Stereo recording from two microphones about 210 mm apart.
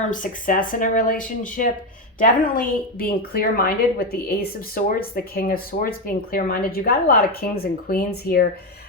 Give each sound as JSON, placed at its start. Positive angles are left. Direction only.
{"t": 0.1, "sound": "a woman's voice", "side_deg": 40}